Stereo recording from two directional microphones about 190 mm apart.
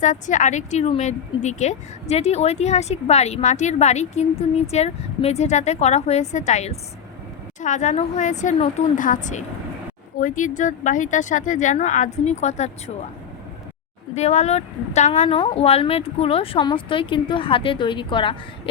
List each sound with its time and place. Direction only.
0.0 s speech: 40° left (ahead or behind)
14.2 s speech: 35° left (ahead or behind)